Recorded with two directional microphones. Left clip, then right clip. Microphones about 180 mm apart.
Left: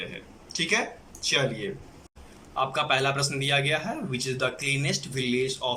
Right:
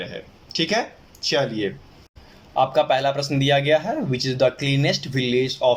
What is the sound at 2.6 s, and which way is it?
Speech, 35° right (ahead or behind).